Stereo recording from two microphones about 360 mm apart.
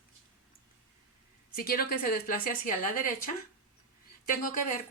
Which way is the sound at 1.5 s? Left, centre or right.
Left.